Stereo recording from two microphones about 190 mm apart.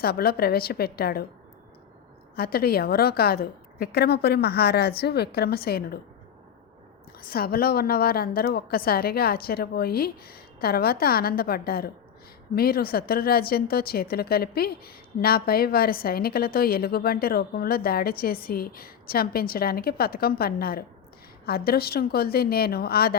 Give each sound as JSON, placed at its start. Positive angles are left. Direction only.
{"t": 0.0, "sound": "a woman's voice", "side_deg": 55}
{"t": 2.3, "sound": "a woman's voice", "side_deg": 55}
{"t": 7.3, "sound": "a woman's voice", "side_deg": 50}